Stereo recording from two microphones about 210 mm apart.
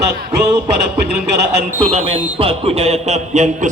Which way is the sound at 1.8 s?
30° right (ahead or behind).